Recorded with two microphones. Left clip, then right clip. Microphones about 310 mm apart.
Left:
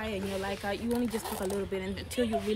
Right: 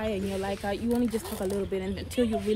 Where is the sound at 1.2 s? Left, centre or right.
Left.